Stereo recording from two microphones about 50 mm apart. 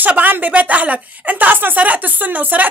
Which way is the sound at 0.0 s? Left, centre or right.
Right.